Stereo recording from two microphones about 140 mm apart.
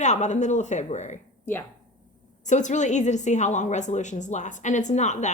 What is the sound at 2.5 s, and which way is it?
A woman's voice, 60° left (ahead or behind).